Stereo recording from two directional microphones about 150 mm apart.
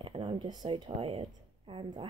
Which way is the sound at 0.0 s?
35° right (ahead or behind).